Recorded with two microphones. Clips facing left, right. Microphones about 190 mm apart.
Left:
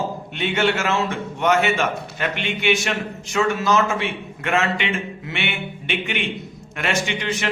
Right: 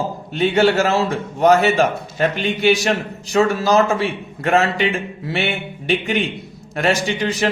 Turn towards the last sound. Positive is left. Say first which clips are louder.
# right 5 dB
turn(degrees=-35)  # may be behind; listen again after turning